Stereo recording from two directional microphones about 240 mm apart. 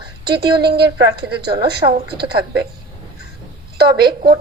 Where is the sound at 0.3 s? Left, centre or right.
Right.